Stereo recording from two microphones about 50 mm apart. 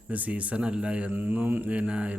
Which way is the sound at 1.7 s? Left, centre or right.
Right.